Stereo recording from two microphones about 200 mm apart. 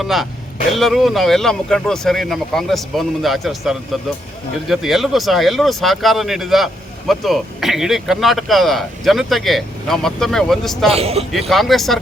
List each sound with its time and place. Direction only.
0.0 s speech: centre (ahead or behind)
10.9 s a man's voice: 30° right (ahead or behind)
11.2 s speech: centre (ahead or behind)